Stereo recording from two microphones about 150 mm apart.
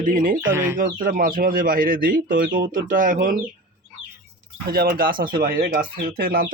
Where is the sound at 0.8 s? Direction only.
70° right (ahead or behind).